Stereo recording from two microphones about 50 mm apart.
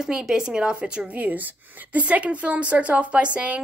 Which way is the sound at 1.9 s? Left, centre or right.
Right.